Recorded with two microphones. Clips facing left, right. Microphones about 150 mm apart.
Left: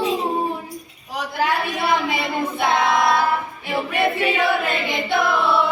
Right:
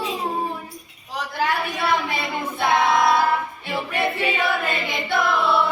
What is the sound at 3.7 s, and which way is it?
Music, 20° left (ahead or behind).